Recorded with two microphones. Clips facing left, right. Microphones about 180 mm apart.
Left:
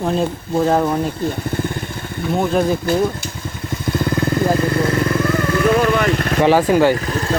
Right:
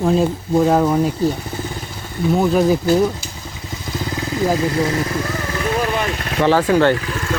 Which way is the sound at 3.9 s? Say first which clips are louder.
Left 6 dB; 55° left (ahead or behind).